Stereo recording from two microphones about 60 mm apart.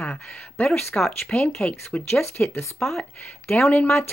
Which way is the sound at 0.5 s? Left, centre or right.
Left.